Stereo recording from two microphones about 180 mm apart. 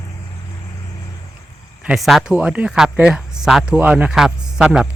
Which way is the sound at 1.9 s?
Centre (ahead or behind).